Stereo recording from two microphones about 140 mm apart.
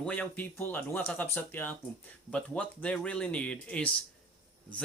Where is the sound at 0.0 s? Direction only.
10° left (ahead or behind).